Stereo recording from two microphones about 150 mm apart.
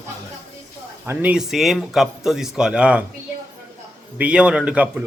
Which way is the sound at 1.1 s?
10° right (ahead or behind).